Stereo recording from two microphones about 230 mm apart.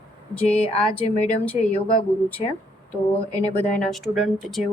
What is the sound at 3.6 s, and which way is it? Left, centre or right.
Speech, left.